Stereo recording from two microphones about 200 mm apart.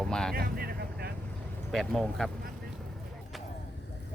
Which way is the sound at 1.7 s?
Centre (ahead or behind).